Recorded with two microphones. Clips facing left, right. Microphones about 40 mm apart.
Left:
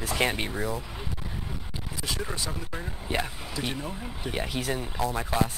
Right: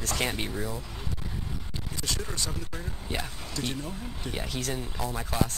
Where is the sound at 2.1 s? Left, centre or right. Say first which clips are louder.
Left 2 dB; centre.